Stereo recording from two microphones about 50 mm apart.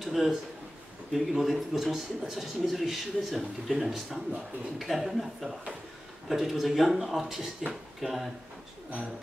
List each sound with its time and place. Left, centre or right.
0.0 s speech: centre